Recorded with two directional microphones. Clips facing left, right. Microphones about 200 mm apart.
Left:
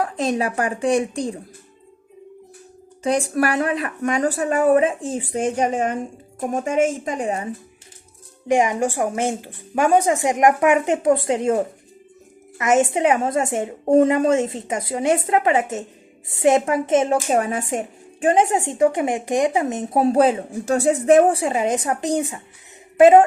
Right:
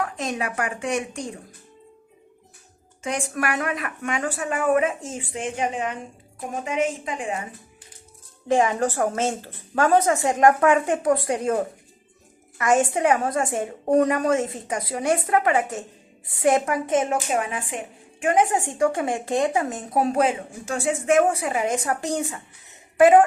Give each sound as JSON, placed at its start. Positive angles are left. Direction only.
{"t": 0.0, "sound": "speech", "side_deg": 35}
{"t": 3.0, "sound": "a woman's voice", "side_deg": 35}
{"t": 8.4, "sound": "a woman's voice", "side_deg": 15}
{"t": 18.3, "sound": "speech", "side_deg": 25}